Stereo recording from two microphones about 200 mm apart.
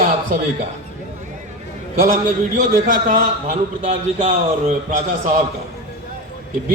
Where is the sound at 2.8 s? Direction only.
40° right (ahead or behind).